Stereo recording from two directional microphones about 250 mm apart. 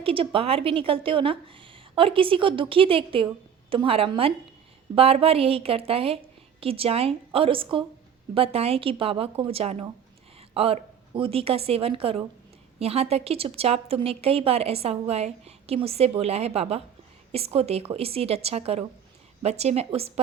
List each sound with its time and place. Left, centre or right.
0.0 s a woman's voice: right